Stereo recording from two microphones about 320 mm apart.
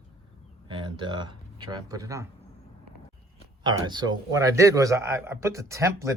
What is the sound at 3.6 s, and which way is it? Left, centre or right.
A man's voice, centre.